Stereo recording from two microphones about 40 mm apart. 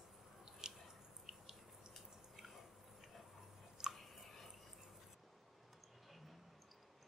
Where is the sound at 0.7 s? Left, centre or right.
Centre.